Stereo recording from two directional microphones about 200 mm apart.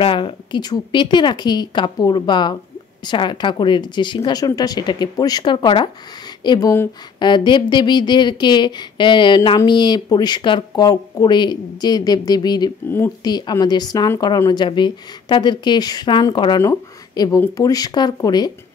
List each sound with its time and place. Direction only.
0.0 s speech: 25° left (ahead or behind)